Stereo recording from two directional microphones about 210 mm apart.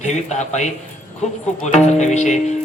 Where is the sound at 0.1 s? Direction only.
35° left (ahead or behind).